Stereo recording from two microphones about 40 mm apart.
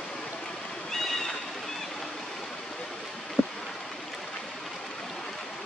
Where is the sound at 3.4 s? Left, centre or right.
Left.